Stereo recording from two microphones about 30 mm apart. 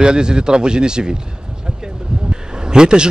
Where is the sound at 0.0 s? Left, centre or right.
Right.